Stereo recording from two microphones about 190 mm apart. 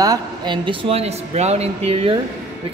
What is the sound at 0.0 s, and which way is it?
Speech, 20° right (ahead or behind).